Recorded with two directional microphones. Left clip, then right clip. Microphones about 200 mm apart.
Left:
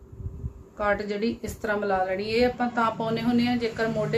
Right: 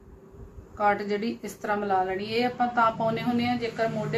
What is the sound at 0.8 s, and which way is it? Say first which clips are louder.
A woman's voice: right 1 dB; 30° left (ahead or behind).